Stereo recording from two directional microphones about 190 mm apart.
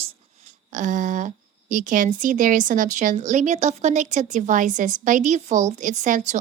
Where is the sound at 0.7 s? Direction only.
40° right (ahead or behind).